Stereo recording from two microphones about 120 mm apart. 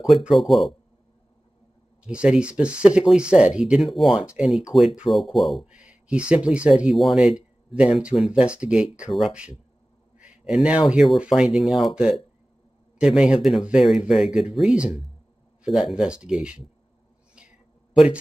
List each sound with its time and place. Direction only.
0.0 s speech: centre (ahead or behind)
2.0 s speech: 10° right (ahead or behind)
17.4 s a sound: 10° right (ahead or behind)